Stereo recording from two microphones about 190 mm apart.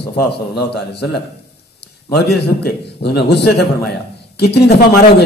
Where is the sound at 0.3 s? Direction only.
60° left (ahead or behind).